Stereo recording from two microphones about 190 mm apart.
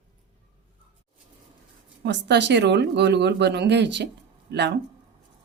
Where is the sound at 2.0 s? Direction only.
65° right (ahead or behind).